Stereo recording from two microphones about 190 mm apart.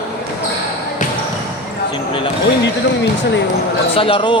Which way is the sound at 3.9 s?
30° left (ahead or behind).